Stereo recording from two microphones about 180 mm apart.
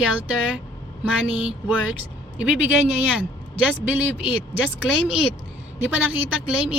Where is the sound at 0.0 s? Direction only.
5° right (ahead or behind).